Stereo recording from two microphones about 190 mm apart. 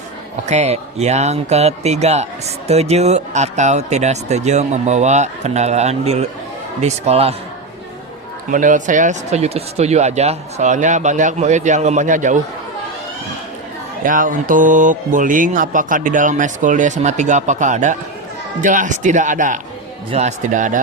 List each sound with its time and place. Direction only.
0.4 s speech: 35° right (ahead or behind)
8.4 s speech: 45° right (ahead or behind)
14.0 s speech: 45° right (ahead or behind)